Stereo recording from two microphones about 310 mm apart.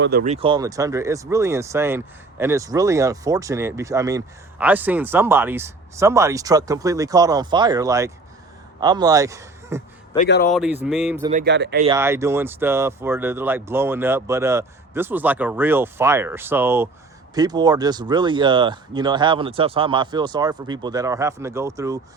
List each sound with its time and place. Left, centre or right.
0.0 s speech: right
0.3 s speech: centre
10.2 s speech: left
10.5 s speech: centre
11.3 s speech: right
11.9 s speech: centre